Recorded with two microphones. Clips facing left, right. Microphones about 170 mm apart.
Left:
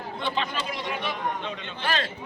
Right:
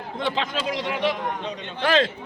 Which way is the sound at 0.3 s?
90° right.